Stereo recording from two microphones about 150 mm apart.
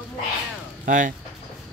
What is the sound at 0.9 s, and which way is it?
Speech, 60° right (ahead or behind).